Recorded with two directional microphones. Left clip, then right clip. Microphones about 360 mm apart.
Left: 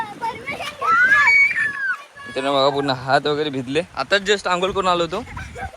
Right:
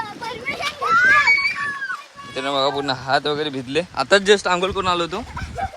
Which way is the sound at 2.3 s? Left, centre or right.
Centre.